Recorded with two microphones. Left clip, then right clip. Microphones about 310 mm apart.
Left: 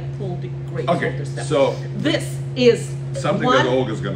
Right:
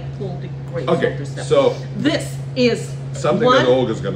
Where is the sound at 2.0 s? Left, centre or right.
Centre.